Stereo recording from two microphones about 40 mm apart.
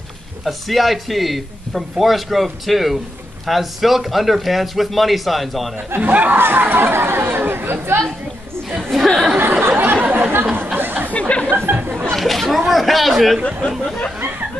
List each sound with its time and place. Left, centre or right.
0.5 s a man's voice: centre
5.9 s speech: right
6.3 s speech: right
8.9 s chatter: centre
9.4 s a sound: right
10.0 s chatter: right
10.3 s chatter: right
10.8 s a sound: right
11.1 s a sound: left
11.5 s a sound: right
12.1 s a man's voice: centre
13.5 s speech: centre